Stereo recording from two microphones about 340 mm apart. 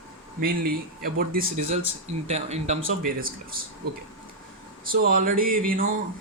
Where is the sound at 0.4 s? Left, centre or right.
Right.